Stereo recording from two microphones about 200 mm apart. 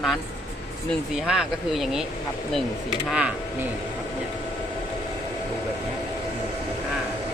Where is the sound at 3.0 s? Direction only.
5° right (ahead or behind).